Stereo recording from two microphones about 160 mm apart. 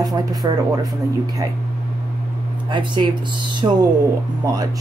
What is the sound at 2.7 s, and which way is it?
Speech, 30° right (ahead or behind).